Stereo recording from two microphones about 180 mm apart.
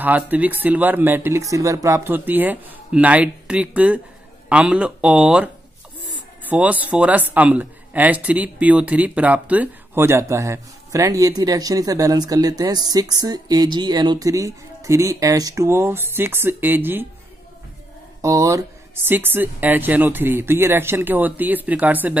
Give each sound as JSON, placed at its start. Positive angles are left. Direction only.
{"t": 0.0, "sound": "speech", "side_deg": -10}
{"t": 18.2, "sound": "speech", "side_deg": -20}